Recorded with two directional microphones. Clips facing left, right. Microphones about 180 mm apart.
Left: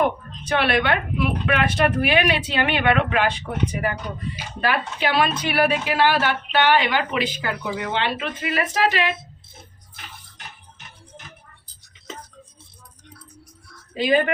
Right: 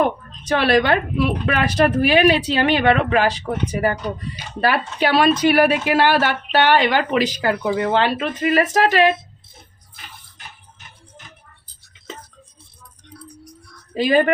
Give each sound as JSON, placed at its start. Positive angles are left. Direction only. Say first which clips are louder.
{"t": 0.4, "sound": "a woman's voice", "louder": "right 4 dB", "side_deg": -35}
{"t": 13.2, "sound": "music", "louder": "right 7 dB", "side_deg": -15}
{"t": 13.9, "sound": "a woman's voice", "louder": "right 4 dB", "side_deg": -40}